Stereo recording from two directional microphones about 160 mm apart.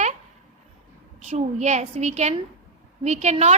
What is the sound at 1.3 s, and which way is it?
A woman's voice, 45° right (ahead or behind).